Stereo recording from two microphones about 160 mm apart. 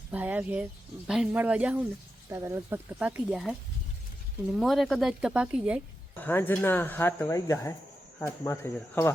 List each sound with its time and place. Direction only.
0.1 s speech: 10° right (ahead or behind)
4.5 s speech: centre (ahead or behind)
6.1 s speech: 10° left (ahead or behind)